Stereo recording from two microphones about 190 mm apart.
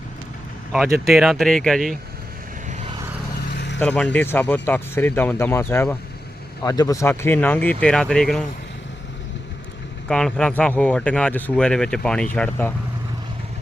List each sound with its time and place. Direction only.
1.0 s speech: centre (ahead or behind)
2.6 s vehicle: 35° right (ahead or behind)
3.5 s vehicle: 60° left (ahead or behind)
3.8 s speech: 5° left (ahead or behind)
10.1 s speech: 5° left (ahead or behind)